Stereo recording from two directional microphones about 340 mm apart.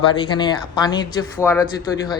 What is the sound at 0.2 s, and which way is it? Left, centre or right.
Speech, centre.